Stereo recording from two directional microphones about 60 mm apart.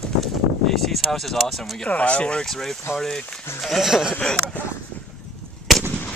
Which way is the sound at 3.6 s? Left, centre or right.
Centre.